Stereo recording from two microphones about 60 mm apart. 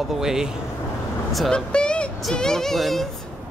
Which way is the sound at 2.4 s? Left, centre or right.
Centre.